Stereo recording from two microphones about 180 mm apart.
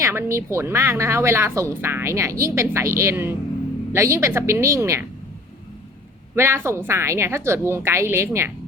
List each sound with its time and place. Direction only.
0.0 s speech: 15° right (ahead or behind)
6.3 s speech: 15° right (ahead or behind)